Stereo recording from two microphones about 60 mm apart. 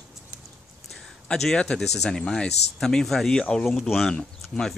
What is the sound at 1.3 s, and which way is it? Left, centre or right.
Speech, centre.